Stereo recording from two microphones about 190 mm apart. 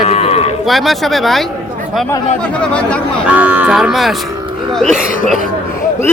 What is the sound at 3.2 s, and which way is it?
Speech, 10° right (ahead or behind).